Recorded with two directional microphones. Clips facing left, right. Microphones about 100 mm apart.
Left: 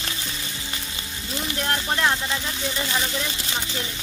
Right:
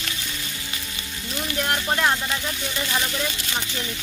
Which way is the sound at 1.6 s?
15° right (ahead or behind).